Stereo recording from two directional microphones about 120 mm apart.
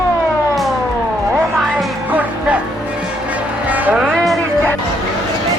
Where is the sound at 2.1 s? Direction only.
10° right (ahead or behind).